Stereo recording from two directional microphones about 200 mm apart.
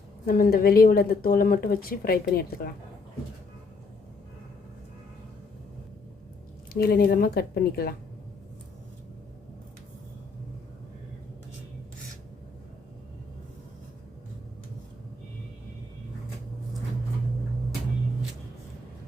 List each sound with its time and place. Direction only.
0.3 s speech: 45° left (ahead or behind)
6.7 s speech: 50° left (ahead or behind)